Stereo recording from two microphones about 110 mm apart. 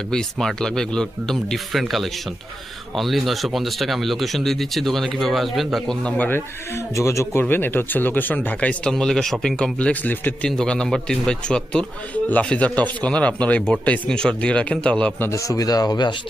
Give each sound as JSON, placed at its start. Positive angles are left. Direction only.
{"t": 0.1, "sound": "a man's voice", "side_deg": 5}
{"t": 15.3, "sound": "speech", "side_deg": 30}